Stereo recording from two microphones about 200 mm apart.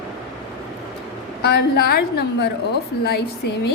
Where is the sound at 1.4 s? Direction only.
55° left (ahead or behind).